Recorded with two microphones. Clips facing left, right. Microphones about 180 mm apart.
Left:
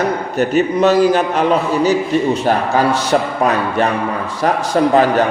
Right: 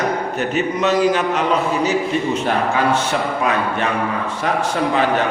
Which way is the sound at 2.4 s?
35° left (ahead or behind).